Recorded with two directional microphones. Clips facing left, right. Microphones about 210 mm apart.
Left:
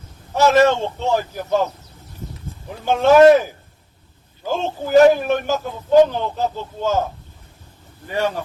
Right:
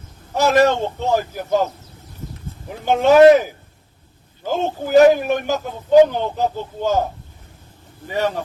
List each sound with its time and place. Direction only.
0.3 s a man's voice: 15° right (ahead or behind)
2.8 s a man's voice: 15° right (ahead or behind)